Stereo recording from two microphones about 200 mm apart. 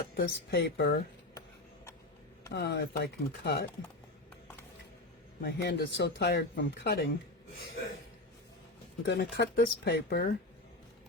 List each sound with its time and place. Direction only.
0.1 s speech: 50° left (ahead or behind)
1.3 s a sound: 15° left (ahead or behind)
2.5 s speech: 55° left (ahead or behind)
5.4 s speech: 55° left (ahead or behind)
9.0 s speech: 50° left (ahead or behind)